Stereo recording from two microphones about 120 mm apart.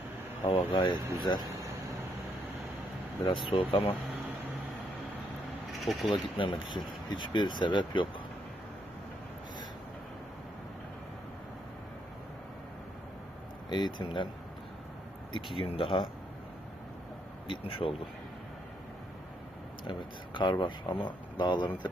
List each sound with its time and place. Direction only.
0.4 s speech: 45° left (ahead or behind)
1.0 s speech: 25° right (ahead or behind)
3.2 s speech: 45° left (ahead or behind)
5.8 s speech: centre (ahead or behind)
6.1 s speech: 45° left (ahead or behind)
13.7 s speech: 35° left (ahead or behind)
15.5 s speech: 50° left (ahead or behind)
17.5 s speech: 50° left (ahead or behind)
19.9 s speech: 40° left (ahead or behind)